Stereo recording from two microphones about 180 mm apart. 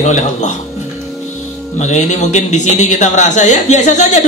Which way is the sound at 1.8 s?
40° left (ahead or behind).